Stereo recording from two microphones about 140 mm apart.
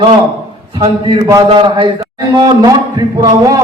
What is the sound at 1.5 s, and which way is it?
A man's voice, 35° right (ahead or behind).